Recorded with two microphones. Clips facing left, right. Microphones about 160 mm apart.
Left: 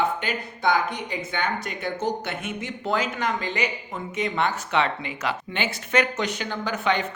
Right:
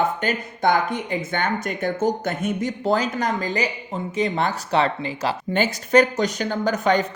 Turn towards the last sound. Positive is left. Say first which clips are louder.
# right 5 dB
turn(degrees=-40)  # may be behind; listen again after turning